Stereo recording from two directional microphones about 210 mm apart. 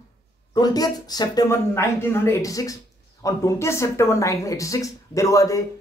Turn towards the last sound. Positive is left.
turn(degrees=15)  # may be behind; listen again after turning